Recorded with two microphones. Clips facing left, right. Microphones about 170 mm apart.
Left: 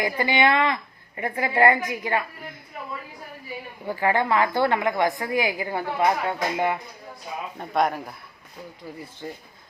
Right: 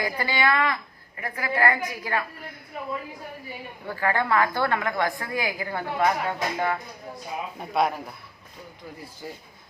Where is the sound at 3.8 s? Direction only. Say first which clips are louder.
Left 3 dB; 20° left (ahead or behind).